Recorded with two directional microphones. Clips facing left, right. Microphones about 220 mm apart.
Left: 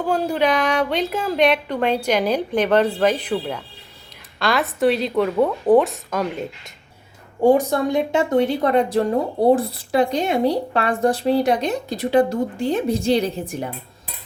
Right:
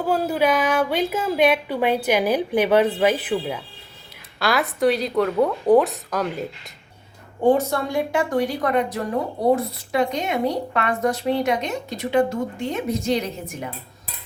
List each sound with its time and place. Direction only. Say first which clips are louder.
0.1 s a woman's voice: even; 5° right (ahead or behind)
7.4 s speech: left 3 dB; 15° left (ahead or behind); by 13.7 s 35° left (ahead or behind)